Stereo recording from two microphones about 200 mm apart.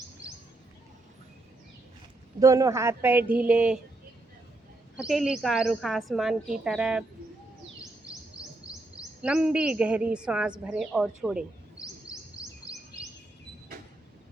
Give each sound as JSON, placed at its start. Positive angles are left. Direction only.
{"t": 2.4, "sound": "speech", "side_deg": -15}
{"t": 4.9, "sound": "a woman's voice", "side_deg": -5}
{"t": 8.4, "sound": "chirp", "side_deg": -5}
{"t": 9.2, "sound": "a woman's voice", "side_deg": -5}
{"t": 12.1, "sound": "a sound", "side_deg": 15}